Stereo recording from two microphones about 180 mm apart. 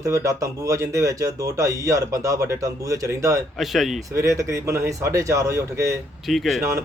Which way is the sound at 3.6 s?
Centre (ahead or behind).